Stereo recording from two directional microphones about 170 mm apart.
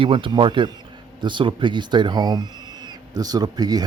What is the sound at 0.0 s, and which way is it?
Speech, 30° right (ahead or behind).